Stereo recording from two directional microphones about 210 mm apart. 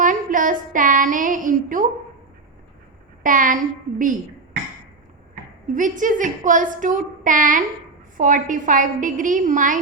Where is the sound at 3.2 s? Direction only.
40° right (ahead or behind).